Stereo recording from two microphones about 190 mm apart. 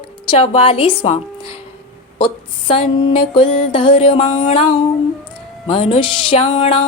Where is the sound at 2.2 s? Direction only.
25° left (ahead or behind).